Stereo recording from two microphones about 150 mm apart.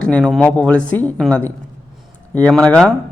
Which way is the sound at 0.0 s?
5° left (ahead or behind).